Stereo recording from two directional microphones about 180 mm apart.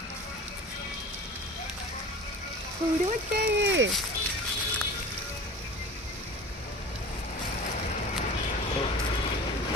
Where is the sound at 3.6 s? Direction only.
80° right.